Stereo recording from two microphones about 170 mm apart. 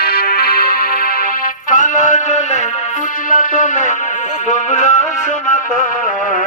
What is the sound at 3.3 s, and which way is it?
A man's voice, 50° left (ahead or behind).